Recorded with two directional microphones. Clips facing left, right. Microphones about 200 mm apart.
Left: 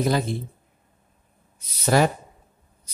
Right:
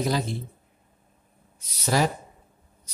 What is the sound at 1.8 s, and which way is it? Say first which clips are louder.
Speech: left 4 dB; 60° left (ahead or behind).